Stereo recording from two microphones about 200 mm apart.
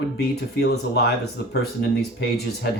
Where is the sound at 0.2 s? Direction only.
55° left (ahead or behind).